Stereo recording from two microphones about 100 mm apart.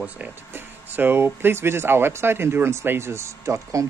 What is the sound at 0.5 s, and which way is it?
Speech, 20° right (ahead or behind).